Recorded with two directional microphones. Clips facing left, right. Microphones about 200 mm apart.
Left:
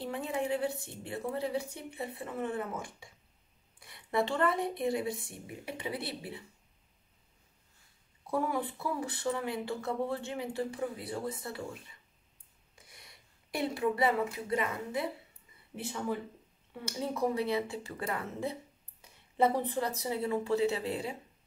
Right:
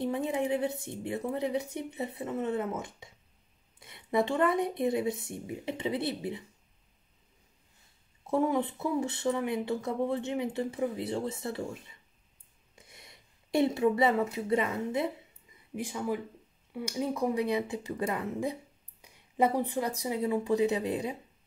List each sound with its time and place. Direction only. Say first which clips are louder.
0.0 s a woman's voice: right 4 dB; 20° right (ahead or behind)
8.3 s a woman's voice: right 5 dB; 20° right (ahead or behind)
15.7 s speech: right 3 dB; 10° right (ahead or behind)